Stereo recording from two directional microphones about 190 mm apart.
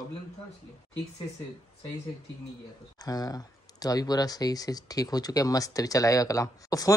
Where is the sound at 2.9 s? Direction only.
20° left (ahead or behind).